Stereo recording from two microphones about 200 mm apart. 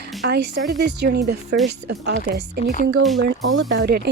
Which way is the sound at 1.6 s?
55° right (ahead or behind).